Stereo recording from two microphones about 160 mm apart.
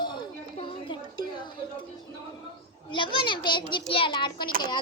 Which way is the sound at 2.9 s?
30° left (ahead or behind).